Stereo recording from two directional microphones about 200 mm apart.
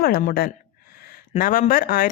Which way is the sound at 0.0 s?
45° left (ahead or behind).